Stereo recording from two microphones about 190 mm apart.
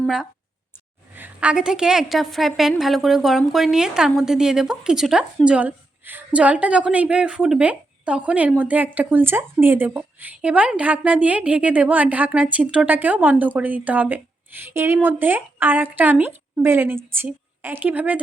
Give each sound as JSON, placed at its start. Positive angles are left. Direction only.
{"t": 0.0, "sound": "a woman's voice", "side_deg": 0}